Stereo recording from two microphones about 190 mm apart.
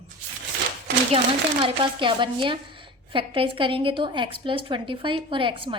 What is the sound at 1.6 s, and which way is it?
A woman's voice, 25° right (ahead or behind).